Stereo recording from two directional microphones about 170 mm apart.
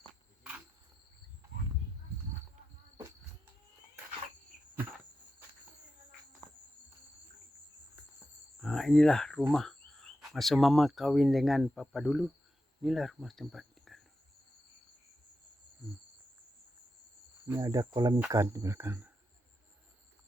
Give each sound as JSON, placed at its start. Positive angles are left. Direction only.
{"t": 8.6, "sound": "a sound", "side_deg": 0}
{"t": 9.5, "sound": "speech", "side_deg": 0}
{"t": 17.4, "sound": "cricket", "side_deg": -20}
{"t": 18.3, "sound": "speech", "side_deg": -20}